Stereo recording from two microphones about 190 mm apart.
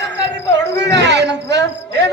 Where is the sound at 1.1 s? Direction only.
65° right (ahead or behind).